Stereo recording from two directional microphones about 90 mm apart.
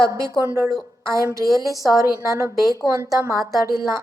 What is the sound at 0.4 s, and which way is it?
Speech, 25° right (ahead or behind).